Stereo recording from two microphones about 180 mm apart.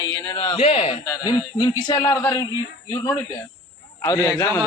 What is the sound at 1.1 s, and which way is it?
Speech, 25° left (ahead or behind).